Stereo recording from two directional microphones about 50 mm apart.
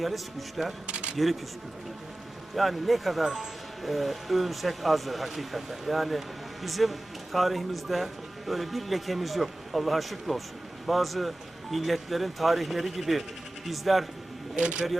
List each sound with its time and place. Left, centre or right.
0.0 s speech: centre
0.9 s camera: right
1.1 s speech: centre
2.6 s speech: centre
14.5 s speech: centre